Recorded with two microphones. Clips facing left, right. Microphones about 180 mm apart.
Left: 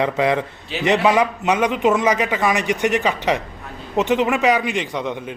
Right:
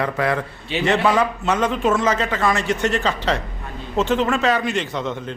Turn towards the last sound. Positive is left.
turn(degrees=15)  # may be behind; listen again after turning